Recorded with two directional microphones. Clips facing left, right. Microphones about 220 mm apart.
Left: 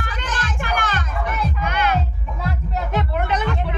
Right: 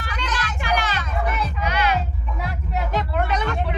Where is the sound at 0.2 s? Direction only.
50° left (ahead or behind).